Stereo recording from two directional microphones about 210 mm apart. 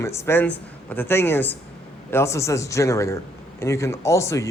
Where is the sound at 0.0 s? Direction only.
15° left (ahead or behind).